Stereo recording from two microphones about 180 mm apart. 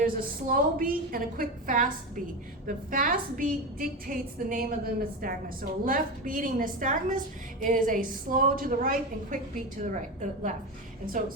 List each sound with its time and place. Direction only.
0.0 s a woman's voice: 50° right (ahead or behind)